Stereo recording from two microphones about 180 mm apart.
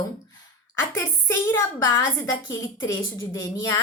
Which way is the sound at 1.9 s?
20° left (ahead or behind).